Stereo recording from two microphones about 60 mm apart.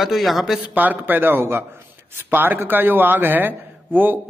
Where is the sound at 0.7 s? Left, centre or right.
Right.